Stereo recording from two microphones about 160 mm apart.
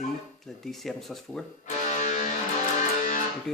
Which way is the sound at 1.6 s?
50° left (ahead or behind).